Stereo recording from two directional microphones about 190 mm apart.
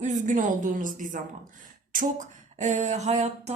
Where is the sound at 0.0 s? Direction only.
40° right (ahead or behind).